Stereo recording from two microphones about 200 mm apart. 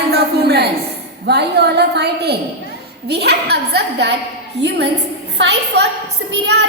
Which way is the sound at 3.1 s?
55° right (ahead or behind).